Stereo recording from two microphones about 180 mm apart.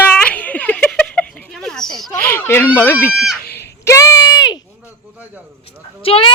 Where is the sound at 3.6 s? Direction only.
15° left (ahead or behind).